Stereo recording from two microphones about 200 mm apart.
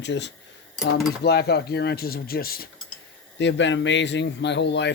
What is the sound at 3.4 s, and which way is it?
Speech, 65° left (ahead or behind).